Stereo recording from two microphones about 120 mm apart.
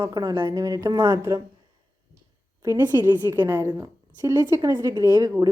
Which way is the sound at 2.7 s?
20° right (ahead or behind).